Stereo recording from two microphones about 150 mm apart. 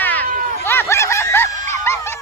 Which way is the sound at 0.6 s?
15° left (ahead or behind).